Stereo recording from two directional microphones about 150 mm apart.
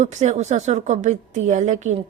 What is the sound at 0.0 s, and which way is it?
A woman's voice, 50° right (ahead or behind).